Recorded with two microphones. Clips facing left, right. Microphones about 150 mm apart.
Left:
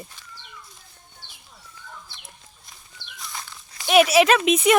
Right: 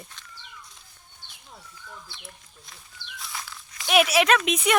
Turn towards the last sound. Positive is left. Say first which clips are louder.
# left 4 dB
turn(degrees=0)  # may be behind; listen again after turning